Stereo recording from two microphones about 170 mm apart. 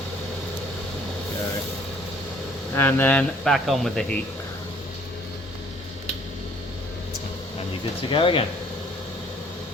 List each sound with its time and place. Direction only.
2.7 s speech: 10° left (ahead or behind)
8.1 s speech: 30° left (ahead or behind)